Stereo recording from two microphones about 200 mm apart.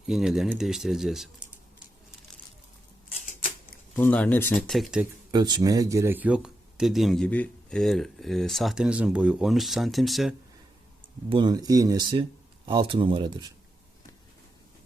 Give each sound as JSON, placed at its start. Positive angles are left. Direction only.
{"t": 0.1, "sound": "speech", "side_deg": 0}
{"t": 3.9, "sound": "speech", "side_deg": 5}
{"t": 5.3, "sound": "speech", "side_deg": -20}
{"t": 11.3, "sound": "speech", "side_deg": -20}